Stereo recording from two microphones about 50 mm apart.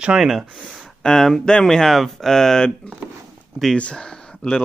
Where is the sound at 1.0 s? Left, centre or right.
Centre.